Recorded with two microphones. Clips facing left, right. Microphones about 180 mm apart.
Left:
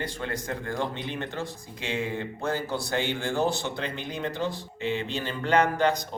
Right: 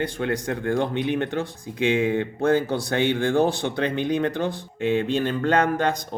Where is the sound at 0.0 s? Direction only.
60° right (ahead or behind).